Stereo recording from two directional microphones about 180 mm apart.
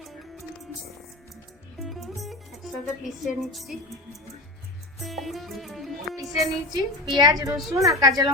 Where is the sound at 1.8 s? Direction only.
Centre (ahead or behind).